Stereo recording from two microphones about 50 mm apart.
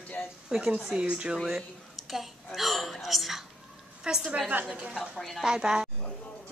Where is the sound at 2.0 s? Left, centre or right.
Centre.